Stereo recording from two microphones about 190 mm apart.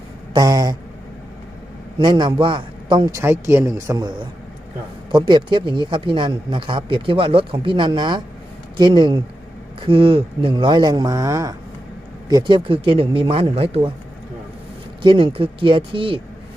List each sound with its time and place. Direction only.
0.3 s speech: 20° right (ahead or behind)
2.0 s speech: 25° right (ahead or behind)
15.0 s speech: 25° right (ahead or behind)